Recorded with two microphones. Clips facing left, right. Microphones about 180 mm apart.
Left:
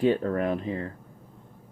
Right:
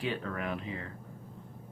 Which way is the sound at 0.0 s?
40° left (ahead or behind).